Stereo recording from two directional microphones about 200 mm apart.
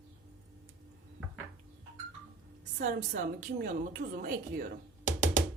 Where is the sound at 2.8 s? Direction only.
40° right (ahead or behind).